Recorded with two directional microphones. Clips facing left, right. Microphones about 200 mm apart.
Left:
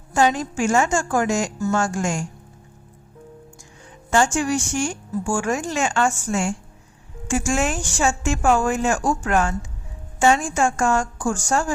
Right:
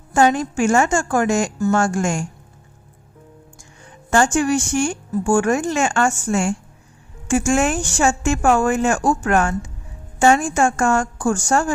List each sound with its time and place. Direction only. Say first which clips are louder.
0.1 s speech: right 3 dB; 55° right (ahead or behind)
4.1 s speech: right 3 dB; 55° right (ahead or behind)